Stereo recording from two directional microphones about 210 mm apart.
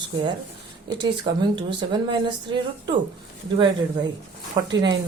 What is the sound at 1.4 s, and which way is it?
Speech, 20° right (ahead or behind).